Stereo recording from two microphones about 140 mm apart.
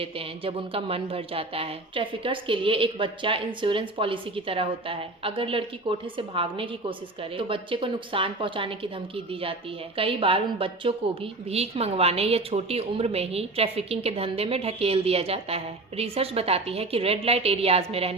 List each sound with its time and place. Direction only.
0.0 s a woman's voice: 40° right (ahead or behind)